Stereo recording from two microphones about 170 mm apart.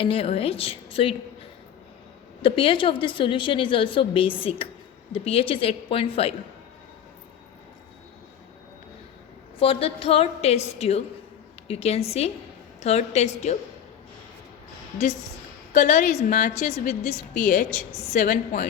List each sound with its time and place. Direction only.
0.0 s a woman's voice: 35° left (ahead or behind)
2.4 s a woman's voice: 30° left (ahead or behind)
9.6 s a woman's voice: 35° left (ahead or behind)
15.7 s a woman's voice: 50° left (ahead or behind)